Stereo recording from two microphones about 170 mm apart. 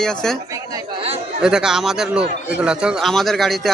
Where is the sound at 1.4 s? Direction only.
5° right (ahead or behind).